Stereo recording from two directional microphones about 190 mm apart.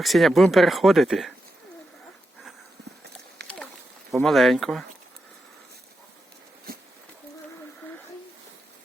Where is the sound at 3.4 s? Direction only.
60° right (ahead or behind).